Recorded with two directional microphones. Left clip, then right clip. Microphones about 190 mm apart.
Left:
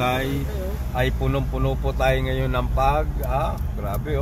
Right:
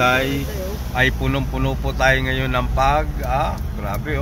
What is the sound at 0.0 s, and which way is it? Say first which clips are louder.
Speech: right 6 dB; centre (ahead or behind).